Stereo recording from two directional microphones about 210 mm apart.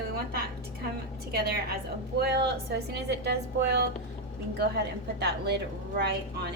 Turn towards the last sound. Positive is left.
turn(degrees=-50)  # may be behind; listen again after turning